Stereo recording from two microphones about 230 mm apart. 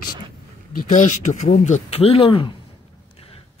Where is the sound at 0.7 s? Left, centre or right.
Left.